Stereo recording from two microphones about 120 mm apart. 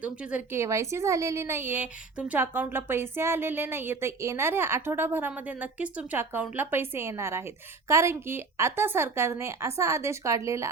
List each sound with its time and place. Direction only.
0.0 s speech: 10° right (ahead or behind)
0.5 s a woman's voice: 25° right (ahead or behind)